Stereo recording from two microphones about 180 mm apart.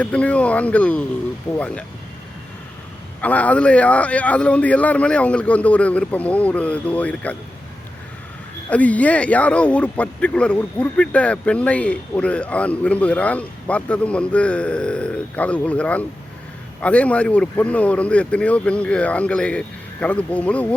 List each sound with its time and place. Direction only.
0.0 s speech: 5° left (ahead or behind)
3.2 s speech: 10° left (ahead or behind)
8.7 s speech: 5° left (ahead or behind)